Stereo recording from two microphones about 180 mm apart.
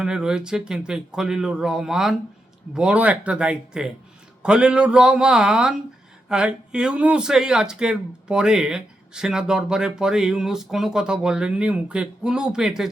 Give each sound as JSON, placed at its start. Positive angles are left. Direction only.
{"t": 0.0, "sound": "speech", "side_deg": -5}